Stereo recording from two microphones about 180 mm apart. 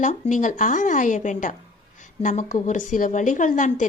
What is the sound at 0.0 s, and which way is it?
A woman's voice, 45° left (ahead or behind).